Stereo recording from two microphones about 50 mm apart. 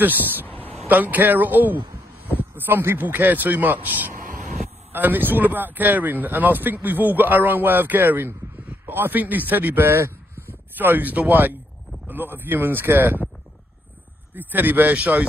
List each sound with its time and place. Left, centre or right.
0.0 s speech: right
10.8 s speech: right
14.3 s speech: right